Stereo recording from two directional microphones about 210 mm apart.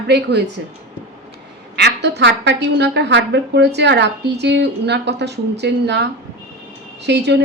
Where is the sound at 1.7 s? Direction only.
55° right (ahead or behind).